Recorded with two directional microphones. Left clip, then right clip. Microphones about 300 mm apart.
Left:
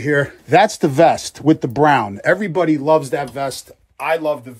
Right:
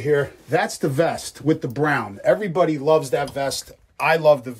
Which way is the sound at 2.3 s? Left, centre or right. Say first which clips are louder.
Left 2 dB; left.